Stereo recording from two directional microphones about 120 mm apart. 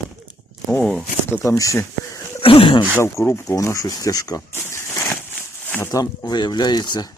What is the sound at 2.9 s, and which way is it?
Speech, 20° left (ahead or behind).